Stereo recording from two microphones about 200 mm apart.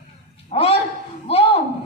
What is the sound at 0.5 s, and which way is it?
A man's voice, 30° left (ahead or behind).